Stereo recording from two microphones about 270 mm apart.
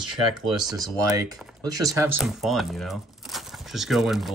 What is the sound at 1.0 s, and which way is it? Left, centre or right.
Speech, centre.